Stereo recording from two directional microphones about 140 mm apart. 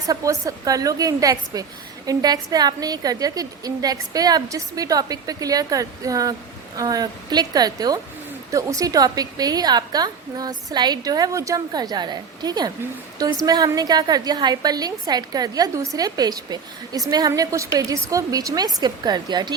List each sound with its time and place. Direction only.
0.1 s a woman's voice: 25° right (ahead or behind)